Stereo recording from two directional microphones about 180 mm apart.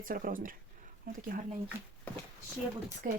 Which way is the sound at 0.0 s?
50° right (ahead or behind).